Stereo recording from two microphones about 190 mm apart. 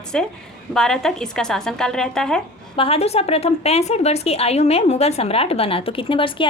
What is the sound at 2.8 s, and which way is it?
A woman's voice, 30° left (ahead or behind).